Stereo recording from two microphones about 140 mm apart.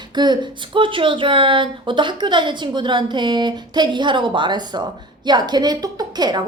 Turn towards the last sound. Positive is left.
turn(degrees=-30)  # may be behind; listen again after turning